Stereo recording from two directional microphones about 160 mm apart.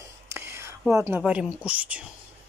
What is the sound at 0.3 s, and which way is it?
Whispering, 15° right (ahead or behind).